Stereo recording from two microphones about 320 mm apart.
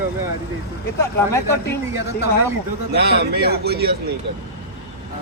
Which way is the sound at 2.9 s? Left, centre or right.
Right.